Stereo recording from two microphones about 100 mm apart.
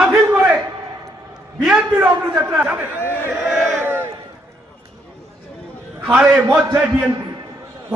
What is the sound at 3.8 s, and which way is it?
Crowd, 25° right (ahead or behind).